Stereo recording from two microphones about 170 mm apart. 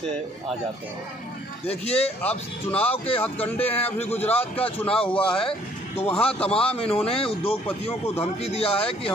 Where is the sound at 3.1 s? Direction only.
35° left (ahead or behind).